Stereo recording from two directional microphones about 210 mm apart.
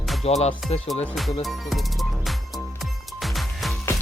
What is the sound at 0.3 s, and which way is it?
Speech, 30° left (ahead or behind).